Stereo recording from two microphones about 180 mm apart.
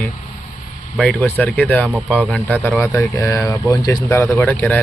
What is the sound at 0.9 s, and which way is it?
Speech, 5° left (ahead or behind).